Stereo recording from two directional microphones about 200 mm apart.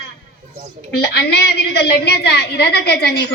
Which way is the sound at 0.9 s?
55° left (ahead or behind).